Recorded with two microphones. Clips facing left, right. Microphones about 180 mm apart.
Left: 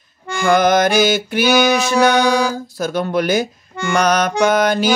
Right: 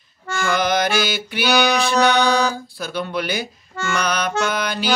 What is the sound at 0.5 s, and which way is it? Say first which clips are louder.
Mantra: left 7 dB; 50° left (ahead or behind).